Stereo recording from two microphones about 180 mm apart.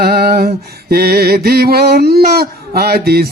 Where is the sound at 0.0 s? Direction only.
60° right (ahead or behind).